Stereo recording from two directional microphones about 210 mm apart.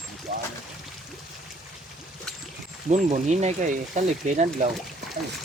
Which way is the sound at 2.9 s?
30° right (ahead or behind).